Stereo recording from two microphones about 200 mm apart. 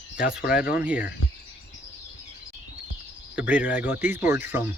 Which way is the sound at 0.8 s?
5° right (ahead or behind).